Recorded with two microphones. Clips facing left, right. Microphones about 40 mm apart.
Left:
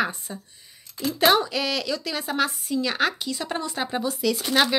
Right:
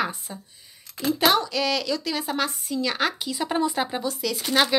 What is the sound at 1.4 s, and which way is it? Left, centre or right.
Speech, centre.